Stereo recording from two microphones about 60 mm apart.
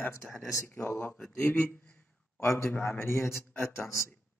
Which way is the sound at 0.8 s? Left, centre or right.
Left.